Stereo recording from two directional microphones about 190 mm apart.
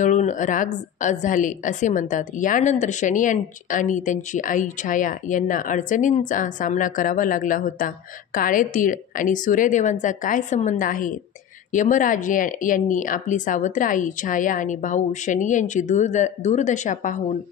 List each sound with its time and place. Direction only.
0.0 s a woman's voice: 40° left (ahead or behind)